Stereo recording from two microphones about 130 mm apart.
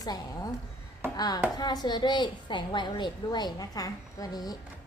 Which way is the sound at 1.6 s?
30° left (ahead or behind).